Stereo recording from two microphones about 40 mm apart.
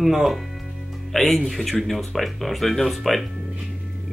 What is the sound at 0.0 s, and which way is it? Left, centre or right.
Speech, centre.